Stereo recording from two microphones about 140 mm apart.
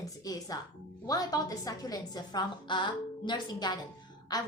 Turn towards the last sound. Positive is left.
turn(degrees=30)  # may be behind; listen again after turning